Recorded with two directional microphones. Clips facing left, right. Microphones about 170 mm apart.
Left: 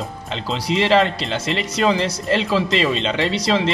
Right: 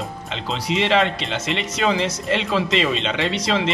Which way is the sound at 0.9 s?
35° left (ahead or behind).